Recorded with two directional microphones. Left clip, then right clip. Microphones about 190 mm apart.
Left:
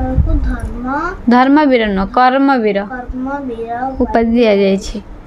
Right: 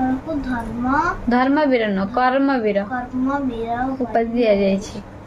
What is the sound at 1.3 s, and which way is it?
A woman's voice, 55° left (ahead or behind).